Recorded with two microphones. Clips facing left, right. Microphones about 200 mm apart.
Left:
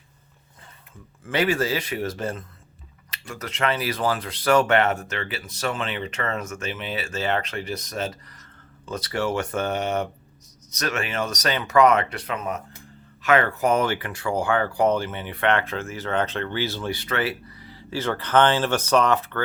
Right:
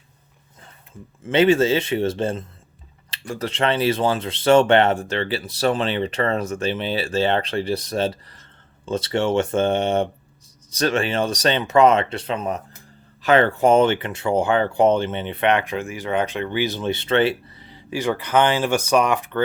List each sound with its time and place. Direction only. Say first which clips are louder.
1.2 s speech: right 7 dB; 25° right (ahead or behind)